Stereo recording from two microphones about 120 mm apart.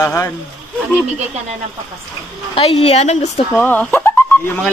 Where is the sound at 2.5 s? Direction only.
60° left (ahead or behind).